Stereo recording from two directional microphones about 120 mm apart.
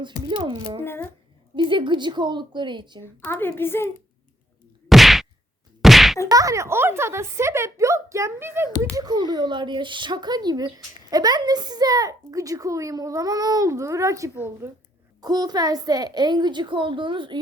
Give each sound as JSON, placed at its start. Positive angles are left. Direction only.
{"t": 0.0, "sound": "a woman's voice", "side_deg": -40}
{"t": 0.8, "sound": "a woman's voice", "side_deg": 20}
{"t": 1.5, "sound": "a woman's voice", "side_deg": -45}
{"t": 3.2, "sound": "a woman's voice", "side_deg": 20}
{"t": 4.9, "sound": "whack", "side_deg": 0}
{"t": 6.2, "sound": "a woman's voice", "side_deg": -30}
{"t": 9.0, "sound": "a woman's voice", "side_deg": -35}
{"t": 15.2, "sound": "a woman's voice", "side_deg": -35}